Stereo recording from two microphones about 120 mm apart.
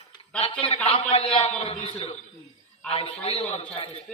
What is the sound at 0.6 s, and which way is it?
A man's voice, 50° left (ahead or behind).